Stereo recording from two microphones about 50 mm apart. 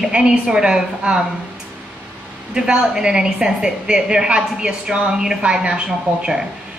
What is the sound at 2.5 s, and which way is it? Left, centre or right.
A woman's voice, centre.